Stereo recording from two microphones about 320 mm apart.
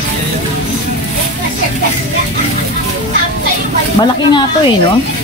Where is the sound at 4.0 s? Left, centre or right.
Centre.